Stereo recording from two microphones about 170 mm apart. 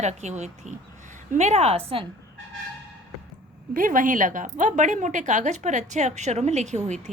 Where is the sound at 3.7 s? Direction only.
55° right (ahead or behind).